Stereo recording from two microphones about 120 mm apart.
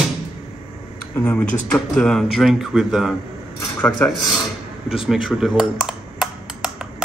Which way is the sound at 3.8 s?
5° left (ahead or behind).